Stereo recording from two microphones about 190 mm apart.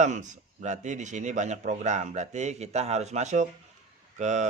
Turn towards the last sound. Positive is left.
turn(degrees=-40)  # may be behind; listen again after turning